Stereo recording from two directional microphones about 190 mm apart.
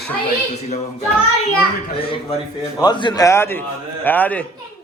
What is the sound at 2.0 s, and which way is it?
A man's voice, 25° left (ahead or behind).